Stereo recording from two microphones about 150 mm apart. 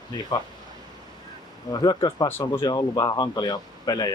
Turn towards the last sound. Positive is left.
turn(degrees=25)  # may be behind; listen again after turning